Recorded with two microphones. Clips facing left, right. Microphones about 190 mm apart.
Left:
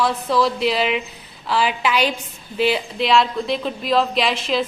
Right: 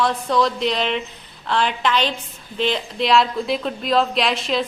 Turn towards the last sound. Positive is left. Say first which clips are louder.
# left 1 dB
turn(degrees=0)  # may be behind; listen again after turning